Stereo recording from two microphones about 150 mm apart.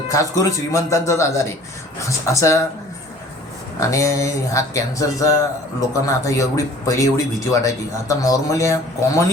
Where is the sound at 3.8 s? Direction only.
20° left (ahead or behind).